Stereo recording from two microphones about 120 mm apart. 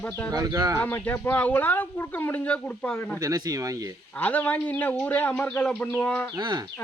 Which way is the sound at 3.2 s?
35° right (ahead or behind).